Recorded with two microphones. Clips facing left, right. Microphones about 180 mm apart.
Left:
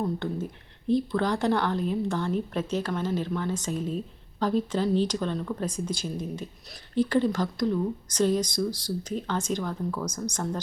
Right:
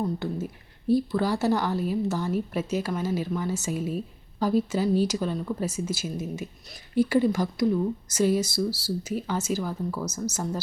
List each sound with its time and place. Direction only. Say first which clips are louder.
0.0 s a woman's voice: even; 5° right (ahead or behind)